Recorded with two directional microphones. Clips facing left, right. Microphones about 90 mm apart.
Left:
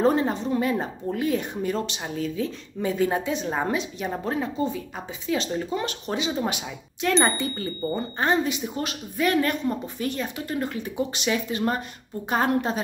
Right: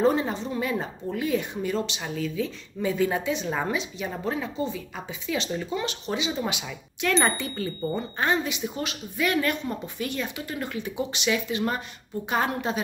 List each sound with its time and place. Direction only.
0.0 s a woman's voice: 45° left (ahead or behind)